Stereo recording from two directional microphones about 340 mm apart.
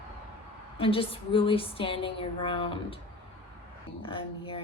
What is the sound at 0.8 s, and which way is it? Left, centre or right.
Speech, centre.